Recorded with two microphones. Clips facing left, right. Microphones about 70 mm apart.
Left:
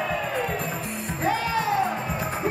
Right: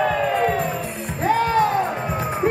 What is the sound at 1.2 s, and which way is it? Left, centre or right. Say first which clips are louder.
Music: right 7 dB; right.